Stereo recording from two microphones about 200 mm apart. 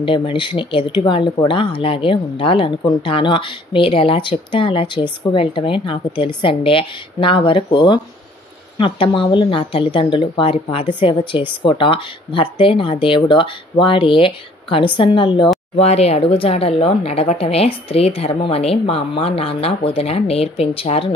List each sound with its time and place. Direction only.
0.0 s speech: 25° left (ahead or behind)